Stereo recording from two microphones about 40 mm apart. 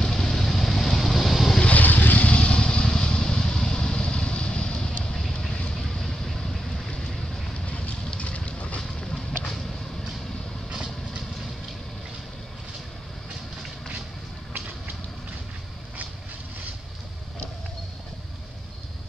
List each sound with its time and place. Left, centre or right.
0.0 s vehicle: centre
1.6 s vehicle: left
2.2 s vehicle: left
5.8 s vehicle: centre
8.2 s a sound: left